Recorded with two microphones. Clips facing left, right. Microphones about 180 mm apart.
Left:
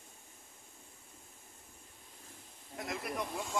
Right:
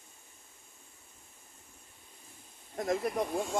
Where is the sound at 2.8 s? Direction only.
45° right (ahead or behind).